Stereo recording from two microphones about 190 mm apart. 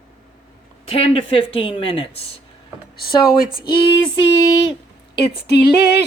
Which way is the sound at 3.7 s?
25° left (ahead or behind).